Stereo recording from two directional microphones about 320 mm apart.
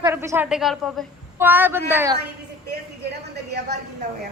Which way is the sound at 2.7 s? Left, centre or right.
Right.